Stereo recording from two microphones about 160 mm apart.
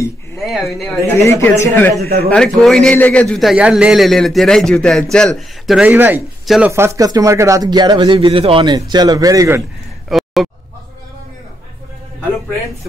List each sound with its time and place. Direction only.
0.4 s a man's voice: centre (ahead or behind)
1.0 s a man's voice: 15° left (ahead or behind); by 6.2 s 10° right (ahead or behind)
6.4 s speech: centre (ahead or behind)
6.7 s speech: 20° right (ahead or behind)
10.0 s a sound: centre (ahead or behind)